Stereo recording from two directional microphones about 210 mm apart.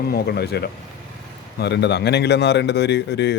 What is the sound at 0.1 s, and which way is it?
Speech, 50° left (ahead or behind).